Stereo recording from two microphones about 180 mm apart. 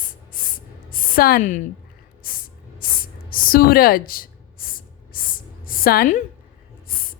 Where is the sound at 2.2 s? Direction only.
50° left (ahead or behind).